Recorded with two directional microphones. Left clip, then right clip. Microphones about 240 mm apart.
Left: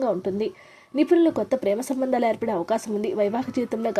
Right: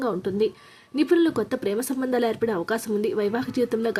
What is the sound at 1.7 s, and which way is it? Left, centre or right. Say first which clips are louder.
A woman's voice: left 1 dB; centre.